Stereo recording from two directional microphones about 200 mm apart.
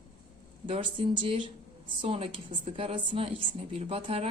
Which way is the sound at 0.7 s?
25° right (ahead or behind).